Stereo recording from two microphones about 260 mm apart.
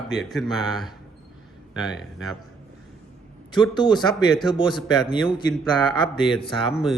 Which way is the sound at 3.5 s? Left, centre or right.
Centre.